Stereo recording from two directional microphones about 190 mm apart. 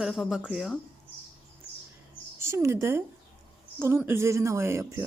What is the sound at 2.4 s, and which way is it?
A woman's voice, 15° right (ahead or behind).